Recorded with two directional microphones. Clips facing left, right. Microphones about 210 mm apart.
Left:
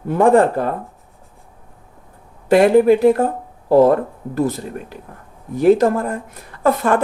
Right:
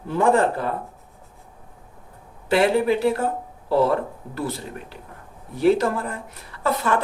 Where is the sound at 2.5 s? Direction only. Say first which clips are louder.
Left 8 dB; 45° left (ahead or behind).